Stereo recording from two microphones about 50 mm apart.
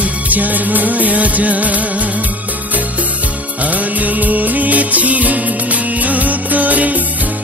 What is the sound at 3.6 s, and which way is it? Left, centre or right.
Music, right.